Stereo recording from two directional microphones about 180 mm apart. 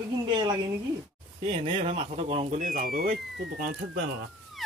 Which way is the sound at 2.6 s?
50° right (ahead or behind).